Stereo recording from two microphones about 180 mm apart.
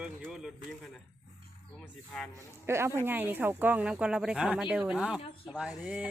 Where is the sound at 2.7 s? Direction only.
15° right (ahead or behind).